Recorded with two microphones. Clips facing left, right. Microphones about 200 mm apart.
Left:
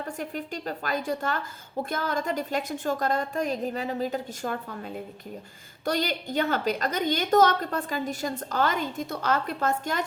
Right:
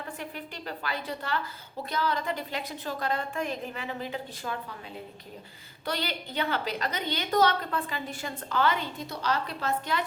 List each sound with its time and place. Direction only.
0.2 s a woman's voice: 45° left (ahead or behind)
5.8 s a woman's voice: 45° left (ahead or behind)